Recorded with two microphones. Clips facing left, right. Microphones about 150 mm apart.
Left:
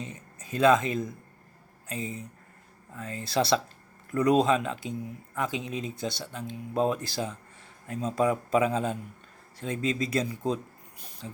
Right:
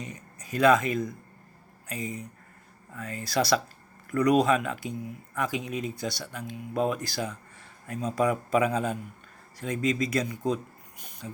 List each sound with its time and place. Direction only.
0.0 s speech: 25° left (ahead or behind)